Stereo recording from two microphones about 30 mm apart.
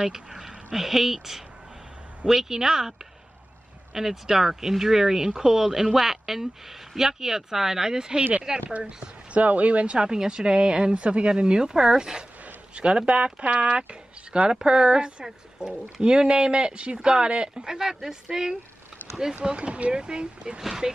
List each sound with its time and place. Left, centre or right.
0.0 s a sound: centre
0.7 s speech: centre
3.9 s speech: centre
9.3 s speech: right
10.0 s speech: right
14.5 s speech: right
19.4 s speech: right
19.9 s speech: right
20.8 s speech: centre